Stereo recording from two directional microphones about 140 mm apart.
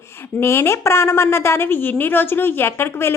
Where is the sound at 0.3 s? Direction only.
20° left (ahead or behind).